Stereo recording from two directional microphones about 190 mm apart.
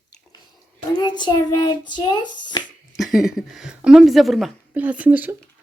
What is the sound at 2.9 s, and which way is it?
Speech, centre (ahead or behind).